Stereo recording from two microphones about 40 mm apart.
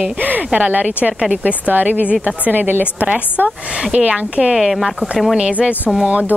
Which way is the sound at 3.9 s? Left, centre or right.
Right.